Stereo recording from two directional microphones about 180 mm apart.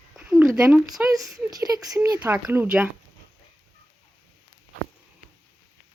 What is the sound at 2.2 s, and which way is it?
Speech, 10° right (ahead or behind).